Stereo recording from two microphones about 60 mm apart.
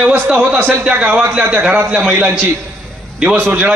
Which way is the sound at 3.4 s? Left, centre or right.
Right.